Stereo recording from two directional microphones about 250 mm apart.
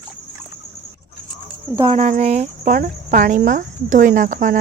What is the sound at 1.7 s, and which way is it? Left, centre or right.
Speech, centre.